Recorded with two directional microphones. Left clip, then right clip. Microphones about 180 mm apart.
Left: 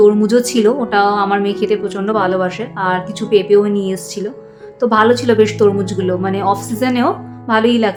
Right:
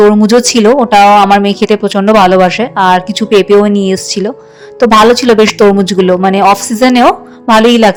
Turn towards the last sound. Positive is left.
turn(degrees=-45)  # may be behind; listen again after turning